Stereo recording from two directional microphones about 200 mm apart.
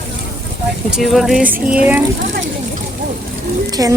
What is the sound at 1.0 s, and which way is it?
Speech, centre (ahead or behind).